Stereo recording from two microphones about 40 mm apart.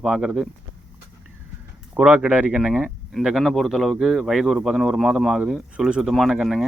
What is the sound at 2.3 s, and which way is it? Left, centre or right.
Speech, right.